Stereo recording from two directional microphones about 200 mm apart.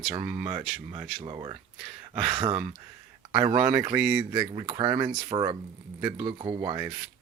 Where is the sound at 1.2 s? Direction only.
25° right (ahead or behind).